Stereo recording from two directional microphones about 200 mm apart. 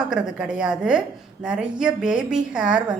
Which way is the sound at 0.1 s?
5° right (ahead or behind).